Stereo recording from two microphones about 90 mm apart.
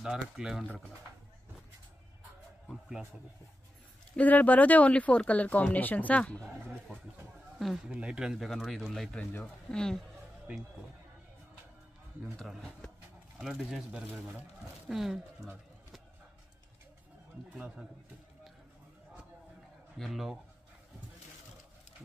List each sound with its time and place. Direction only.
0.0 s speech: 5° right (ahead or behind)
4.2 s speech: 15° left (ahead or behind)
7.5 s speech: 5° right (ahead or behind)
10.5 s speech: 15° right (ahead or behind)
12.4 s speech: 5° left (ahead or behind)
20.0 s speech: 5° right (ahead or behind)